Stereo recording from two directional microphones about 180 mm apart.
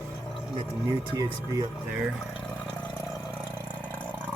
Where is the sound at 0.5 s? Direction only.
20° right (ahead or behind).